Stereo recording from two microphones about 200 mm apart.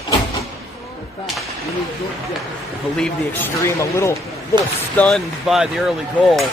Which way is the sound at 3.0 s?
10° left (ahead or behind).